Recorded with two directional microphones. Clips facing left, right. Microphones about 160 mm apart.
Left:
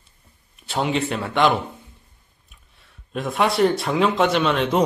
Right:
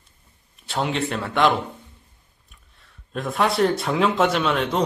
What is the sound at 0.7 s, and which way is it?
Speech, centre (ahead or behind).